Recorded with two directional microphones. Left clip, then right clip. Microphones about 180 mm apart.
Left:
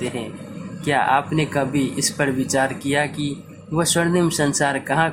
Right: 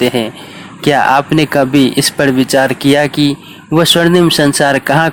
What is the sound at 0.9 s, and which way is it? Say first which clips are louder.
Speech: right 9 dB; 50° right (ahead or behind).